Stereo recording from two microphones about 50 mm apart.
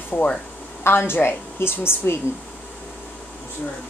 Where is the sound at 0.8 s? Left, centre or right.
Left.